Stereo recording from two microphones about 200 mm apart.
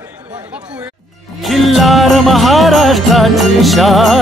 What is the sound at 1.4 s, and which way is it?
Jingle bell, centre (ahead or behind).